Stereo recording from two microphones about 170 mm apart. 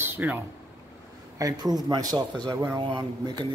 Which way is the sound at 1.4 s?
20° right (ahead or behind).